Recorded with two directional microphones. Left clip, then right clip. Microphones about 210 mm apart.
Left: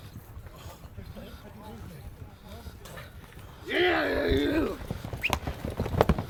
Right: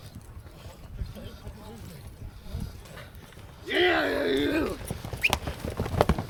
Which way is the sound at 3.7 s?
15° right (ahead or behind).